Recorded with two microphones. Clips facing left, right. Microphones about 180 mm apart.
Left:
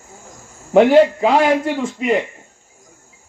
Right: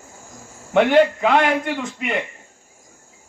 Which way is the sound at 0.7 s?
35° left (ahead or behind).